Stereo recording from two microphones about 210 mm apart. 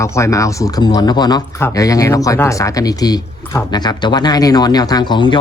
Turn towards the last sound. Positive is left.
turn(degrees=20)  # may be behind; listen again after turning